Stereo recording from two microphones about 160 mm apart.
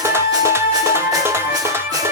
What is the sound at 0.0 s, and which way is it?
Music, 15° right (ahead or behind).